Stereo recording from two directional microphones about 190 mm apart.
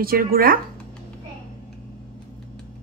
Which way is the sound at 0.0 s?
50° right (ahead or behind).